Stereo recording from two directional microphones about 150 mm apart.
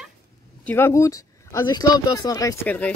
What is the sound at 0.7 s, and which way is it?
Speech, 15° left (ahead or behind).